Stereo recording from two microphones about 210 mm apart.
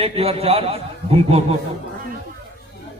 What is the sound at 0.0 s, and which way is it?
A man's voice, 30° right (ahead or behind).